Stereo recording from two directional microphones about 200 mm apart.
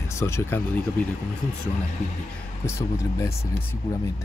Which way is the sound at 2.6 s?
15° left (ahead or behind).